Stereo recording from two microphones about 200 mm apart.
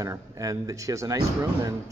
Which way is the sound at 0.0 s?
15° right (ahead or behind).